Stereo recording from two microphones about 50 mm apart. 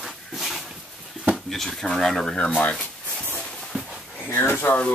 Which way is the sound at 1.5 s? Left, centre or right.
Centre.